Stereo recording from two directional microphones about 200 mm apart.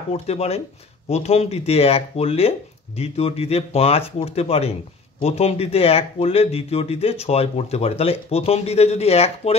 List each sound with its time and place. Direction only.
0.1 s speech: 30° left (ahead or behind)